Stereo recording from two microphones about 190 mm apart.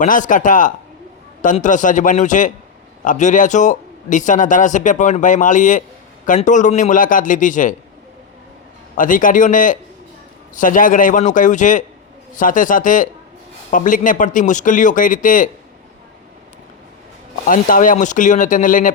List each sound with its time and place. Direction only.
0.0 s a man's voice: 45° left (ahead or behind)
9.0 s a man's voice: 45° left (ahead or behind)
17.5 s a man's voice: 45° left (ahead or behind)